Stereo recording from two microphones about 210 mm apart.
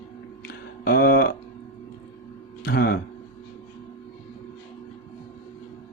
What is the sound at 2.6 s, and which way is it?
Speech, 45° left (ahead or behind).